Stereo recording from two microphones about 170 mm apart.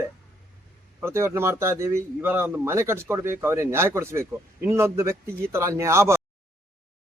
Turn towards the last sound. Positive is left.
turn(degrees=-15)  # may be behind; listen again after turning